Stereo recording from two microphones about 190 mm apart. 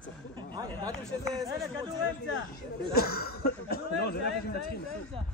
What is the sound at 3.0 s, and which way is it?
Speech, 55° left (ahead or behind).